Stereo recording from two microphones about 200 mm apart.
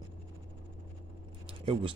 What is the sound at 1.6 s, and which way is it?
Speech, 25° right (ahead or behind).